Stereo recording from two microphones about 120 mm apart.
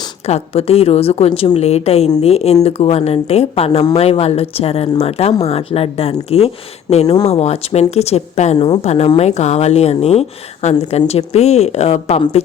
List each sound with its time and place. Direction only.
0.3 s speech: 60° left (ahead or behind)
8.5 s speech: 45° left (ahead or behind)
8.8 s speech: 65° left (ahead or behind)